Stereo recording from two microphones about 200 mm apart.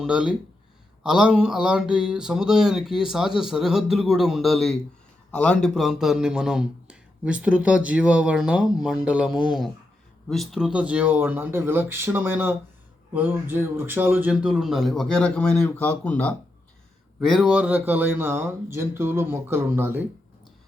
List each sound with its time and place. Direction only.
0.0 s a man's voice: 5° right (ahead or behind)